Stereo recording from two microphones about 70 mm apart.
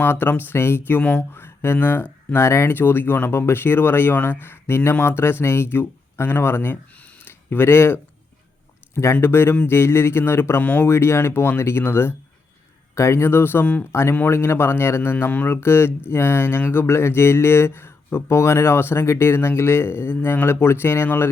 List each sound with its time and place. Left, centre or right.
0.0 s speech: left
9.2 s speech: left
10.6 s speech: left
10.8 s speech: left